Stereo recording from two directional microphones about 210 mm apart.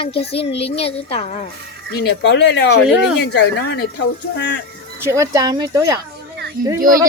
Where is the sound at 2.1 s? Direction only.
55° left (ahead or behind).